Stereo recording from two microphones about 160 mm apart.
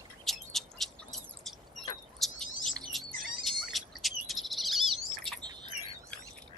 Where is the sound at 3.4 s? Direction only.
Centre (ahead or behind).